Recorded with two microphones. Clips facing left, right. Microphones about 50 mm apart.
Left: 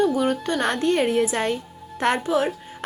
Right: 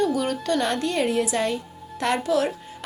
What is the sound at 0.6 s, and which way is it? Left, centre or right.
A woman's voice, left.